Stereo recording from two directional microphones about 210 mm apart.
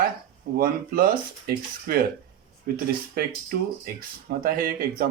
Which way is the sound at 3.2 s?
45° right (ahead or behind).